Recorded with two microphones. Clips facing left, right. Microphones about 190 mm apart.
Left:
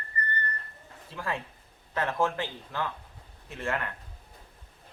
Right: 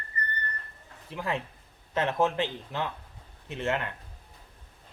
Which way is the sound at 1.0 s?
20° right (ahead or behind).